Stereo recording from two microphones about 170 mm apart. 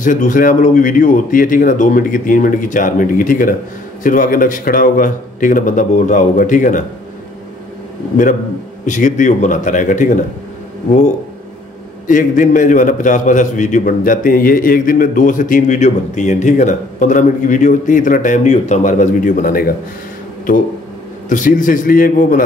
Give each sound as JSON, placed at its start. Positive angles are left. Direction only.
{"t": 0.0, "sound": "a man's voice", "side_deg": 50}
{"t": 8.8, "sound": "a man's voice", "side_deg": 45}
{"t": 12.1, "sound": "a man's voice", "side_deg": 50}
{"t": 21.3, "sound": "a man's voice", "side_deg": 50}